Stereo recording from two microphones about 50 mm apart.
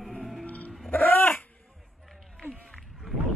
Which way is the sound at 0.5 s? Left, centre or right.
Left.